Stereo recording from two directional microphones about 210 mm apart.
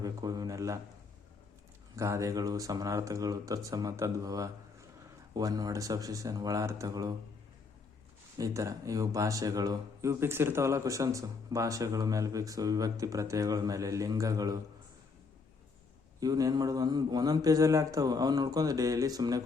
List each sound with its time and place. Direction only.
0.0 s a man's voice: 15° right (ahead or behind)
2.0 s speech: 15° right (ahead or behind)
8.4 s speech: 15° right (ahead or behind)
16.2 s speech: 15° right (ahead or behind)